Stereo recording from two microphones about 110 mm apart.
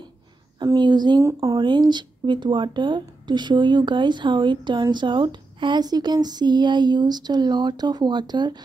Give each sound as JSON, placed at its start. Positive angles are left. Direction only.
{"t": 0.7, "sound": "speech", "side_deg": -40}
{"t": 1.2, "sound": "speech", "side_deg": -30}
{"t": 1.6, "sound": "speech", "side_deg": -45}